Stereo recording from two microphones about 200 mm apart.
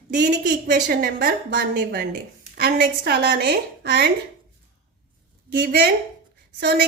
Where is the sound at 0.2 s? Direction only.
55° right (ahead or behind).